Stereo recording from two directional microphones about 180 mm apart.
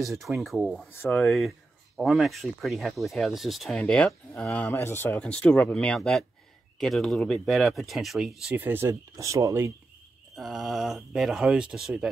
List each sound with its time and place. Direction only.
0.2 s speech: centre (ahead or behind)
0.9 s speech: 10° left (ahead or behind)
1.2 s speech: centre (ahead or behind); by 9.7 s 15° right (ahead or behind)
10.3 s speech: centre (ahead or behind)